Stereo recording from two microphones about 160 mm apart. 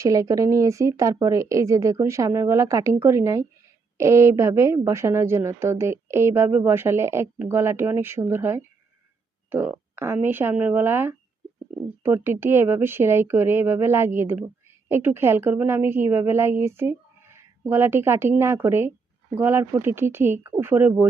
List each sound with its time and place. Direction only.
0.0 s a woman's voice: 20° right (ahead or behind)